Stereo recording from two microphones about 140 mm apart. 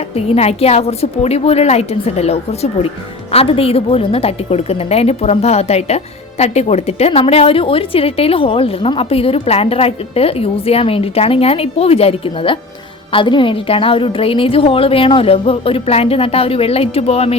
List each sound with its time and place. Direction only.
0.1 s a woman's voice: 45° left (ahead or behind)